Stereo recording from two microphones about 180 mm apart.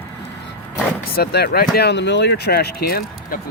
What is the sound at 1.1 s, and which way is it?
Speech, 60° left (ahead or behind).